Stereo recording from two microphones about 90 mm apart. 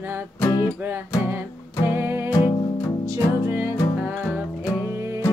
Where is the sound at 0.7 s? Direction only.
25° right (ahead or behind).